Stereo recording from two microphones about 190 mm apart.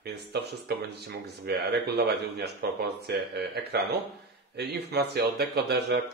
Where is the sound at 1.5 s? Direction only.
60° right (ahead or behind).